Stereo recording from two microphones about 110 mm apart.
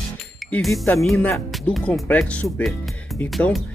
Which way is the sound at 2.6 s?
Centre (ahead or behind).